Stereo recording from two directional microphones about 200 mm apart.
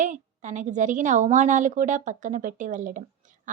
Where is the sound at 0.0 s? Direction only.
40° right (ahead or behind).